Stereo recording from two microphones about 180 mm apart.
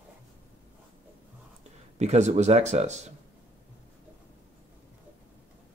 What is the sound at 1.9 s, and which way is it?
Speech, 40° right (ahead or behind).